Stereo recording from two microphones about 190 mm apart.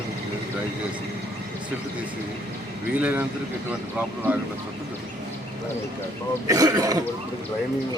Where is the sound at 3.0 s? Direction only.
10° right (ahead or behind).